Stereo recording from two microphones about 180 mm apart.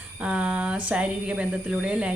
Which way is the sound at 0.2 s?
5° right (ahead or behind).